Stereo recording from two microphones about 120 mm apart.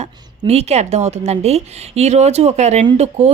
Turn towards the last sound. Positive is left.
turn(degrees=-65)  # may be behind; listen again after turning